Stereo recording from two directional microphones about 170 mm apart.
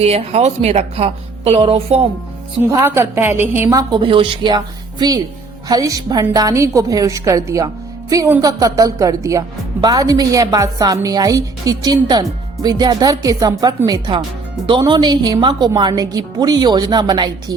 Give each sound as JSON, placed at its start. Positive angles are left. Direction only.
{"t": 0.0, "sound": "a woman's voice", "side_deg": -40}
{"t": 2.6, "sound": "a woman's voice", "side_deg": -15}